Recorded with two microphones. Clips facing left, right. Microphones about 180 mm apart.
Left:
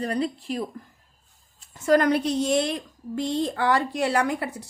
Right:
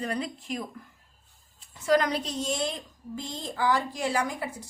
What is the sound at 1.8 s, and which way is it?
A woman's voice, 50° left (ahead or behind).